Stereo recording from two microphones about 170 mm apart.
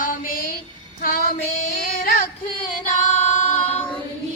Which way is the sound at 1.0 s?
55° left (ahead or behind).